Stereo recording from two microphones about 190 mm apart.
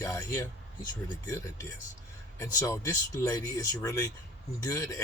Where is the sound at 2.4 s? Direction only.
15° left (ahead or behind).